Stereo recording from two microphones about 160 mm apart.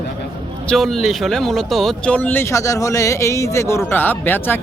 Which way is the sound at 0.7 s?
Centre (ahead or behind).